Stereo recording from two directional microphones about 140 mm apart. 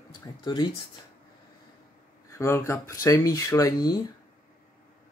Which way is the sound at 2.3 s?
20° left (ahead or behind).